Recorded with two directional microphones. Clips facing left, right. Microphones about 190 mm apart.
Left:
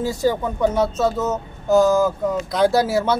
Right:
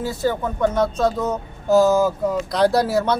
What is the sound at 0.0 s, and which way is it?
Speech, 15° left (ahead or behind).